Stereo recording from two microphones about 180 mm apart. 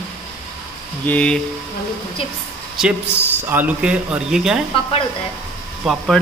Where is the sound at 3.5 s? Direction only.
5° right (ahead or behind).